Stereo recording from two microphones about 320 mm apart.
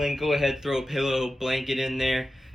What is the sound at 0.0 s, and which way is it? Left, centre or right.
Speech, centre.